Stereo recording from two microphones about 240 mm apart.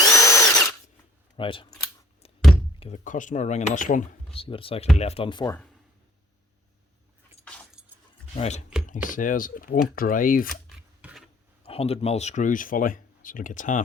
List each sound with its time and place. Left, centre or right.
0.0 s drill: centre
1.4 s speech: left
2.8 s speech: left
7.4 s keys jangling: centre
8.4 s speech: left
10.7 s scissors: centre
11.6 s speech: left